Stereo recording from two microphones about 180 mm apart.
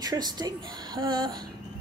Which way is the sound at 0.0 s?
20° right (ahead or behind).